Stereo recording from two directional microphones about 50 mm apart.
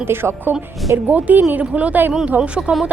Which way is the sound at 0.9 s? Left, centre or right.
Right.